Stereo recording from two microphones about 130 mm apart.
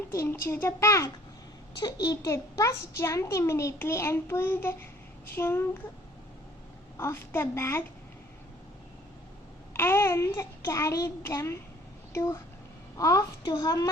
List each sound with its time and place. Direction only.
0.1 s a child's voice: 20° left (ahead or behind)
6.9 s a child's voice: 20° left (ahead or behind)
9.7 s a child's voice: 20° left (ahead or behind)